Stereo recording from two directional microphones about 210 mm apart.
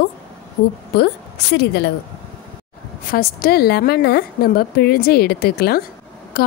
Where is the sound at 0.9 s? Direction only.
50° left (ahead or behind).